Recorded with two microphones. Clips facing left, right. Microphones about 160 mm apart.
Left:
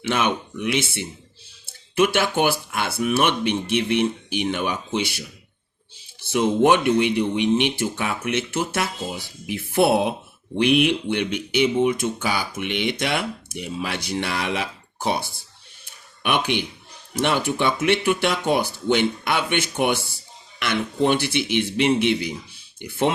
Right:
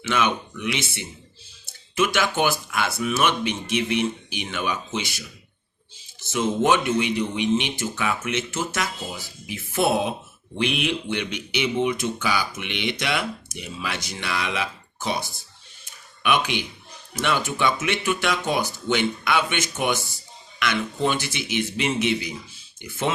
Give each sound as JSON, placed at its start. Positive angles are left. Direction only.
{"t": 0.1, "sound": "speech", "side_deg": 55}
{"t": 2.1, "sound": "speech", "side_deg": 55}
{"t": 6.4, "sound": "speech", "side_deg": 60}
{"t": 15.8, "sound": "a sound", "side_deg": 55}
{"t": 17.2, "sound": "speech", "side_deg": 60}